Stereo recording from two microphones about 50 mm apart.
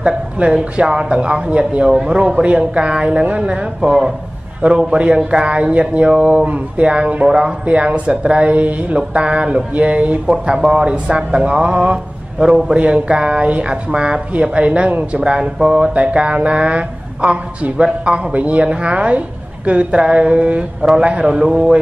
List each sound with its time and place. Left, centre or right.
0.0 s speech: right
15.2 s speech: centre